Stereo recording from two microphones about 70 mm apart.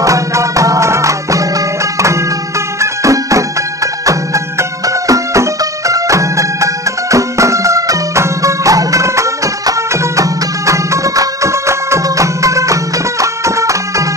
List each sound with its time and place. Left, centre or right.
0.0 s music: right
2.8 s music: right